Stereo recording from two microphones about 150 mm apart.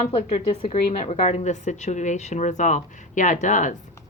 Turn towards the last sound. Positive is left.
turn(degrees=55)  # may be behind; listen again after turning